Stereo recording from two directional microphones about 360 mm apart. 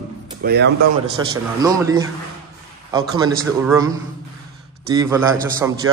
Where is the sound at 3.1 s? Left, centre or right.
Centre.